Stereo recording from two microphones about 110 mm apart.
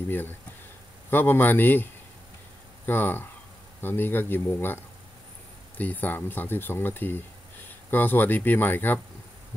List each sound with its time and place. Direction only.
0.1 s a man's voice: 20° left (ahead or behind)
2.9 s speech: 20° left (ahead or behind)